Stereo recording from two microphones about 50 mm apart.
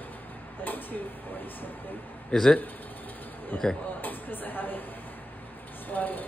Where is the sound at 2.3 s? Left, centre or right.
Centre.